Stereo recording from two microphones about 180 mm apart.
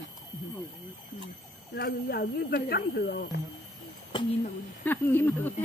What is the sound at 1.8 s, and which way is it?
Speech, 60° left (ahead or behind).